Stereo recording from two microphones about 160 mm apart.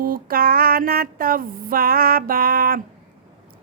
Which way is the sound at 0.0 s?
65° right (ahead or behind).